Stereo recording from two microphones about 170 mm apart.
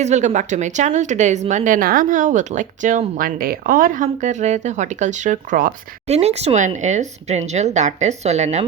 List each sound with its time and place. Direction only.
0.0 s a woman's voice: 40° right (ahead or behind)
6.1 s a woman's voice: 40° right (ahead or behind)